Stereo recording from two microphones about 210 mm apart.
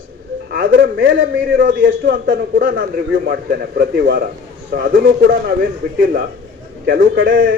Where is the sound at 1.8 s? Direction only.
45° right (ahead or behind).